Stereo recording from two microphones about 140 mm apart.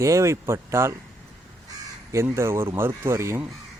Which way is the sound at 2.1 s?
20° right (ahead or behind).